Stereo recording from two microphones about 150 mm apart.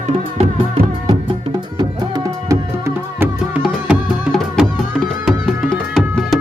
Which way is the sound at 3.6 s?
5° right (ahead or behind).